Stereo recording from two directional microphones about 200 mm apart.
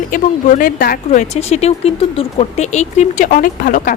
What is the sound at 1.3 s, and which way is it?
Speech, 30° left (ahead or behind).